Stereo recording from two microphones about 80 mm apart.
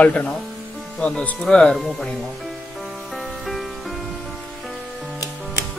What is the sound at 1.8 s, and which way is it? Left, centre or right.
Music, centre.